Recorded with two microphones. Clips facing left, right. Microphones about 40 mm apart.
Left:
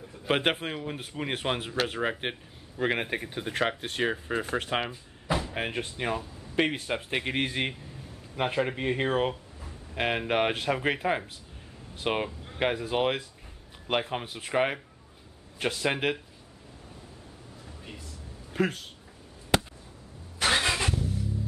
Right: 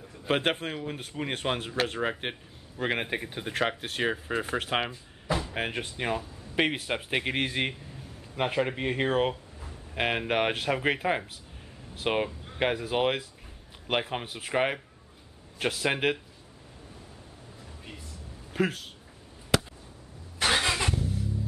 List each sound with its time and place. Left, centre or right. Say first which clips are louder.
0.3 s speech: left 1 dB; centre
18.5 s speech: even; centre
20.3 s vehicle: even; centre